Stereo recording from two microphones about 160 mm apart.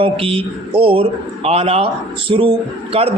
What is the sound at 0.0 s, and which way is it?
Speech, 35° right (ahead or behind).